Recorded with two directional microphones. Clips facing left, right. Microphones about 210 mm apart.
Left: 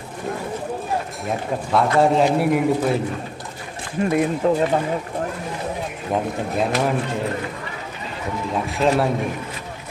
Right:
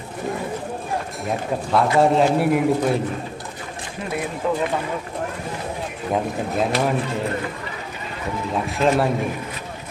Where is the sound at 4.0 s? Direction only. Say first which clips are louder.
Left 10 dB; 50° left (ahead or behind).